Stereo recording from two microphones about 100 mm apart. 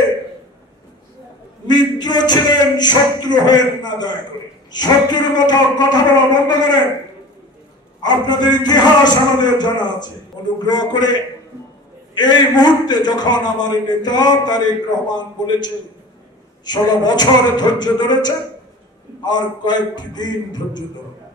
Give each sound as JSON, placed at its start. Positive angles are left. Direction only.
{"t": 1.7, "sound": "a man's voice", "side_deg": 45}
{"t": 8.0, "sound": "a man's voice", "side_deg": 45}
{"t": 12.2, "sound": "a man's voice", "side_deg": 45}